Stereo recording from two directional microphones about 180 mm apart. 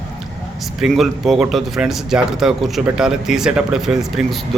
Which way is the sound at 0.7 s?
Centre (ahead or behind).